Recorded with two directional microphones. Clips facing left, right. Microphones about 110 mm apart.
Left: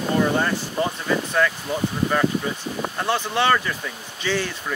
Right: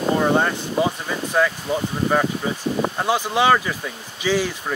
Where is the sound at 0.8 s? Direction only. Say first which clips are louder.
Right 2 dB; 10° right (ahead or behind).